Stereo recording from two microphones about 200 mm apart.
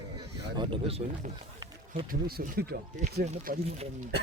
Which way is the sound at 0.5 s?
25° right (ahead or behind).